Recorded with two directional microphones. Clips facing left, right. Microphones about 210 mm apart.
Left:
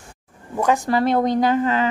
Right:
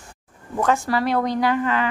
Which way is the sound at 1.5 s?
35° left (ahead or behind).